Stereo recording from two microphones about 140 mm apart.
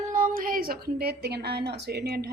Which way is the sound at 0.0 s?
65° right (ahead or behind).